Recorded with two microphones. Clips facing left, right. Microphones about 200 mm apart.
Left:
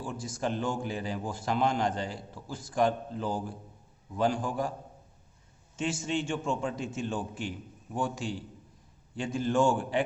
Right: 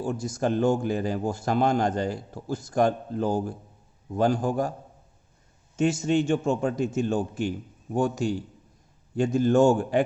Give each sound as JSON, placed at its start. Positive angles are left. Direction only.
{"t": 0.0, "sound": "a man's voice", "side_deg": -40}
{"t": 5.7, "sound": "a man's voice", "side_deg": -40}